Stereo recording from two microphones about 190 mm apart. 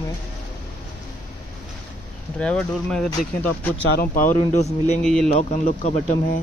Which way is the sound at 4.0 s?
45° left (ahead or behind).